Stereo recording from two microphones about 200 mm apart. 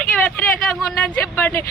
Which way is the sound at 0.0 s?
5° left (ahead or behind).